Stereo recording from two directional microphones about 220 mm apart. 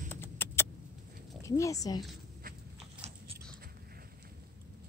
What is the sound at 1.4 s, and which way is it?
Speech, 15° left (ahead or behind).